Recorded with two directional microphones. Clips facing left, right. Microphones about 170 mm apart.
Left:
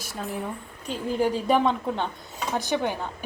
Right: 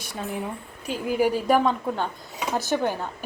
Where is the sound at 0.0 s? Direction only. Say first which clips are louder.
Right 1 dB; centre (ahead or behind).